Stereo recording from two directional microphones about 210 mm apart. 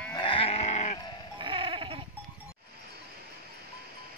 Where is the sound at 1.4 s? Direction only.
25° right (ahead or behind).